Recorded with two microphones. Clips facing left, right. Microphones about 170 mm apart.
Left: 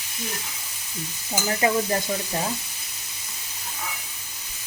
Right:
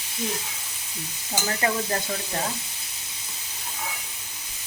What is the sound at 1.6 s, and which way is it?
Speech, 10° left (ahead or behind).